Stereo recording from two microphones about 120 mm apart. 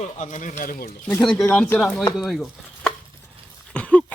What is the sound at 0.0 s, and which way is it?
Speech, 90° left.